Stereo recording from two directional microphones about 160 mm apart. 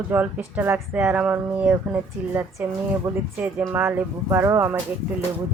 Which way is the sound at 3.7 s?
15° right (ahead or behind).